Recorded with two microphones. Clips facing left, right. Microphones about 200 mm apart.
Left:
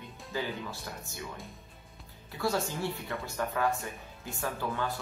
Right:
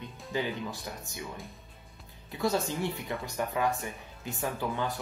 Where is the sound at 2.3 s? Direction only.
20° right (ahead or behind).